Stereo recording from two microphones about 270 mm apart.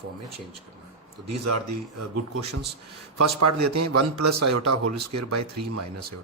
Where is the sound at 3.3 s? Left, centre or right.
Right.